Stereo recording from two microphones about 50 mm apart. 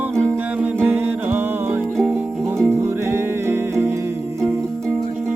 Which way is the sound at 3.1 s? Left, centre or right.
Right.